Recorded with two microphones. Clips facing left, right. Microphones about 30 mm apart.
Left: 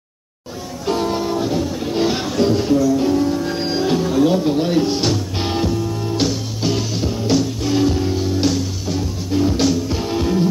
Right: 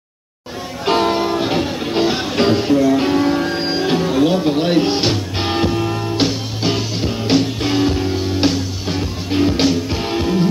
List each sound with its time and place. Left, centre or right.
0.8 s music: right
1.1 s music: right
1.8 s music: right
2.0 s music: right
2.3 s music: right
2.6 s music: right
2.9 s music: right
3.4 s music: right
7.7 s music: right